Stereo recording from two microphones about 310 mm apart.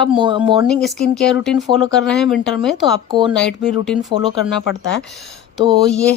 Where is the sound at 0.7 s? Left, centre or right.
Centre.